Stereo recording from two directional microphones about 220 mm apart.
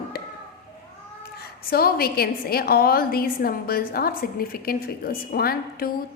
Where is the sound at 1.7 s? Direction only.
45° left (ahead or behind).